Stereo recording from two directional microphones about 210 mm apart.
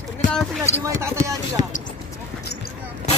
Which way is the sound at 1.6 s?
35° left (ahead or behind).